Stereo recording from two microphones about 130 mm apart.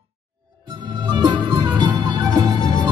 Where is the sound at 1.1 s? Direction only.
35° right (ahead or behind).